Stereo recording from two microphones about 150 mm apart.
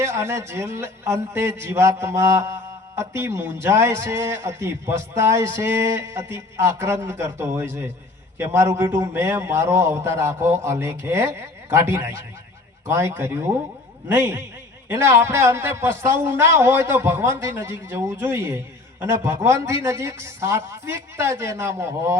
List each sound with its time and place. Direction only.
0.0 s a man's voice: 20° right (ahead or behind)